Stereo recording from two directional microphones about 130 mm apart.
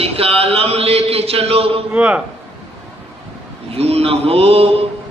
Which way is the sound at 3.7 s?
50° right (ahead or behind).